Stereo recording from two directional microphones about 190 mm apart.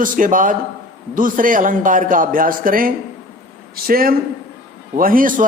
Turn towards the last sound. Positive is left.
turn(degrees=-50)  # may be behind; listen again after turning